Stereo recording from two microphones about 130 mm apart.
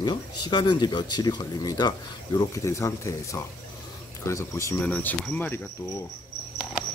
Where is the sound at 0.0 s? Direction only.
35° left (ahead or behind).